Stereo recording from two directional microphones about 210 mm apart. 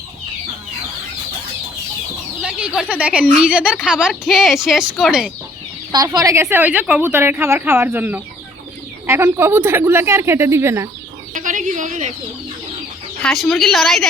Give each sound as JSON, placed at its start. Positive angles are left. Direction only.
{"t": 2.9, "sound": "a woman's voice", "side_deg": -5}
{"t": 5.9, "sound": "a woman's voice", "side_deg": -15}
{"t": 11.3, "sound": "a woman's voice", "side_deg": -35}
{"t": 13.2, "sound": "a woman's voice", "side_deg": 0}